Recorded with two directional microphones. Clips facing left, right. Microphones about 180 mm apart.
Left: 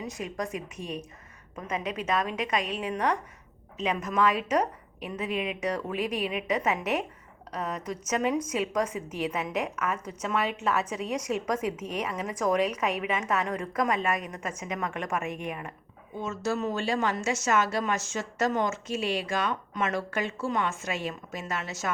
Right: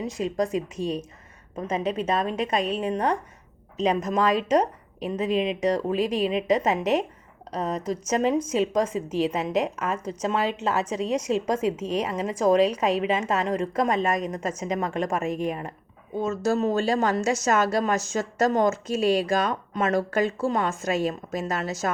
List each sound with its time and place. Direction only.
0.0 s a woman's voice: 30° right (ahead or behind)